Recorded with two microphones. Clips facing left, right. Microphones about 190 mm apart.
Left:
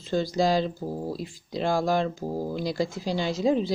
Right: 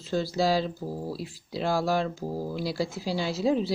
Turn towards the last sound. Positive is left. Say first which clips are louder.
# left 2 dB
turn(degrees=-5)  # may be behind; listen again after turning